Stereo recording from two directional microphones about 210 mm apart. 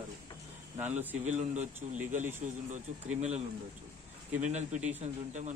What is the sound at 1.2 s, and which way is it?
Speech, 35° right (ahead or behind).